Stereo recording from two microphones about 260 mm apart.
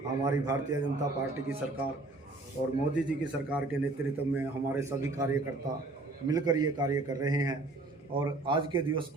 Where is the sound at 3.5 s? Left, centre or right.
Centre.